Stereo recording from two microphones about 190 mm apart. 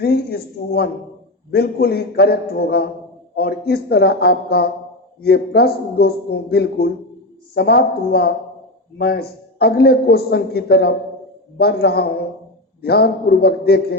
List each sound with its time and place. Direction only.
0.0 s a woman's voice: 55° left (ahead or behind)